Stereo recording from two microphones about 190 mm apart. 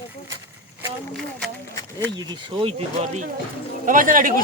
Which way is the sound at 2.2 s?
25° right (ahead or behind).